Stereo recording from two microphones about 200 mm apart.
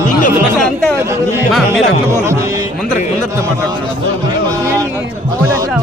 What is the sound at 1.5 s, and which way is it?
Speech, centre (ahead or behind).